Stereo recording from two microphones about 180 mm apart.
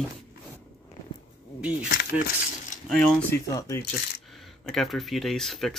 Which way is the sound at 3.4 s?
15° left (ahead or behind).